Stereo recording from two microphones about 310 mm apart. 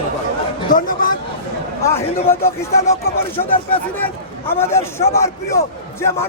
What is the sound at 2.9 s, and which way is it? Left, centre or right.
Speech, centre.